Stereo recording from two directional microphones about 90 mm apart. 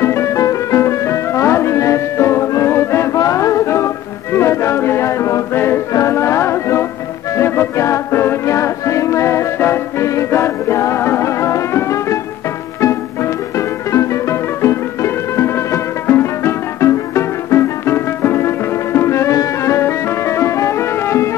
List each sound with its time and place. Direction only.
0.0 s music: 30° left (ahead or behind)